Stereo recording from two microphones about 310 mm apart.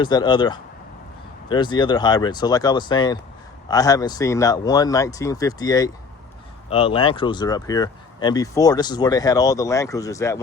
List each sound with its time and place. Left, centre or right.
0.0 s speech: centre